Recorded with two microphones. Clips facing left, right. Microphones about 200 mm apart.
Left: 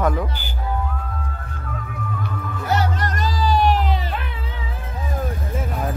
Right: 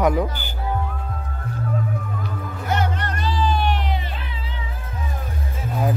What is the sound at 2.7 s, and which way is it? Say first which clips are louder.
Music: left 2 dB; 40° left (ahead or behind).